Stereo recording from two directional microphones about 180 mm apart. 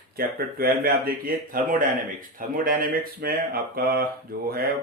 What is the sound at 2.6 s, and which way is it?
Speech, 55° right (ahead or behind).